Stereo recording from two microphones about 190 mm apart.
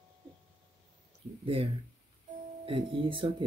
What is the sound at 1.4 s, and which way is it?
Speech, 30° right (ahead or behind).